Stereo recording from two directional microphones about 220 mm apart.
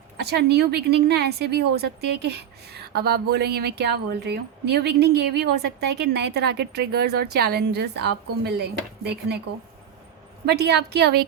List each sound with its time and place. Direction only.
0.2 s a woman's voice: 50° right (ahead or behind)
10.4 s a woman's voice: 50° right (ahead or behind)